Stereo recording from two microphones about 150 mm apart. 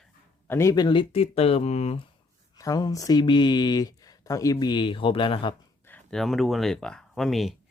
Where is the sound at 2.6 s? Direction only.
25° left (ahead or behind).